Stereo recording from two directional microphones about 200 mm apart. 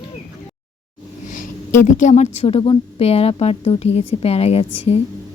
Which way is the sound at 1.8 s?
40° left (ahead or behind).